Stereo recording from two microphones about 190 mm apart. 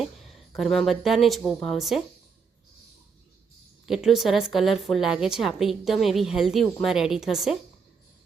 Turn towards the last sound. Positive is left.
turn(degrees=0)  # may be behind; listen again after turning